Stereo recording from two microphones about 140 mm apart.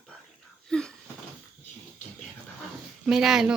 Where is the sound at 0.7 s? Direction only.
5° left (ahead or behind).